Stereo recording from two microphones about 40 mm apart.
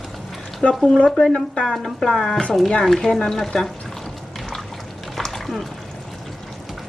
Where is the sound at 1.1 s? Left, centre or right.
Centre.